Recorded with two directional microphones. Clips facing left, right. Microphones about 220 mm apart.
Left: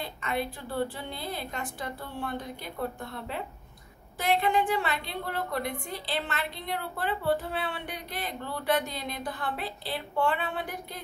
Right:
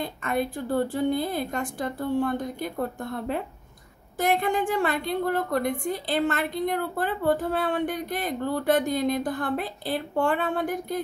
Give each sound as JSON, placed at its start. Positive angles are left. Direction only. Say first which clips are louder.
{"t": 0.0, "sound": "a woman's voice", "louder": "right 5 dB", "side_deg": -50}